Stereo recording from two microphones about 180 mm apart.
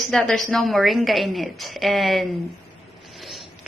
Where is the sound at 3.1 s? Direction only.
Centre (ahead or behind).